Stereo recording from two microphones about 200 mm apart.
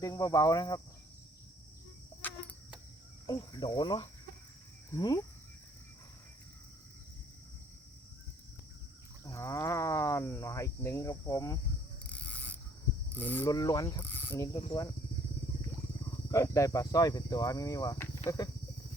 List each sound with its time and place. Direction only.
0.0 s cricket: 15° left (ahead or behind)
3.2 s cricket: 20° left (ahead or behind)
9.2 s cricket: 15° left (ahead or behind)
12.0 s pulleys: 5° left (ahead or behind)
13.1 s cricket: 10° left (ahead or behind)
16.3 s cricket: 15° left (ahead or behind)